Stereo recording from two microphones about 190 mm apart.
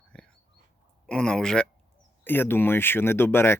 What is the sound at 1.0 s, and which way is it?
Speech, 5° left (ahead or behind).